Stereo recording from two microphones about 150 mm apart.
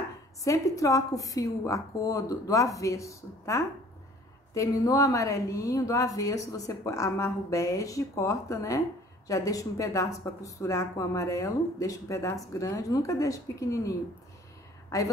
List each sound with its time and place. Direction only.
0.4 s a woman's voice: 20° left (ahead or behind)